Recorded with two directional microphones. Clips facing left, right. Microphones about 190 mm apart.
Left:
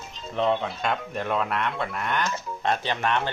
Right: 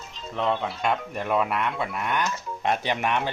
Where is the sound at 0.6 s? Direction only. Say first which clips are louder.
Right 1 dB; 5° right (ahead or behind).